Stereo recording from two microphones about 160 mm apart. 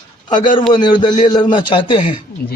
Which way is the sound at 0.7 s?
30° left (ahead or behind).